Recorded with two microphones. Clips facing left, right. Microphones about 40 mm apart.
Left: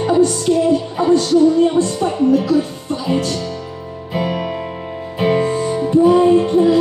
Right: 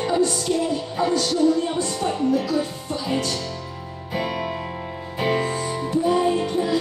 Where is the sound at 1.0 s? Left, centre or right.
Left.